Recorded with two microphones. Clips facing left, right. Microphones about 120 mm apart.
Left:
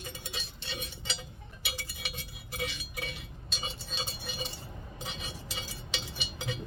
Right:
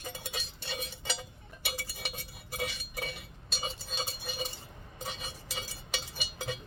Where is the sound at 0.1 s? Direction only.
45° right (ahead or behind).